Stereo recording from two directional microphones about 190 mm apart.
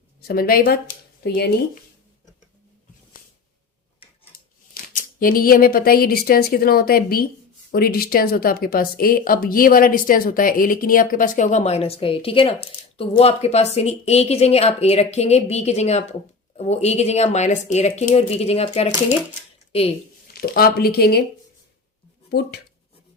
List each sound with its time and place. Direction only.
0.2 s speech: 55° left (ahead or behind)
4.7 s speech: 50° left (ahead or behind); by 19.9 s 30° left (ahead or behind)
20.3 s speech: 55° left (ahead or behind)
22.3 s speech: 60° left (ahead or behind)